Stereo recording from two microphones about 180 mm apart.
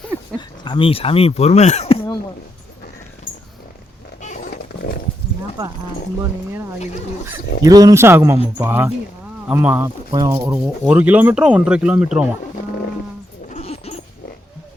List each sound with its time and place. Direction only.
0.3 s speech: 25° left (ahead or behind)
4.2 s a sound: 40° left (ahead or behind)
7.3 s speech: 20° right (ahead or behind)
10.1 s speech: 25° right (ahead or behind)
10.8 s speech: 10° right (ahead or behind)
13.5 s dog: 35° left (ahead or behind)